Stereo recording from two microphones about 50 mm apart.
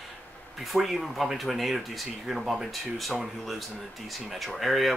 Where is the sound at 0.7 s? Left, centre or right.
Centre.